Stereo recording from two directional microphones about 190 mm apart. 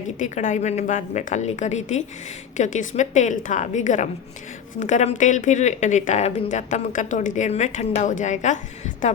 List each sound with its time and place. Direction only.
0.2 s speech: 40° left (ahead or behind)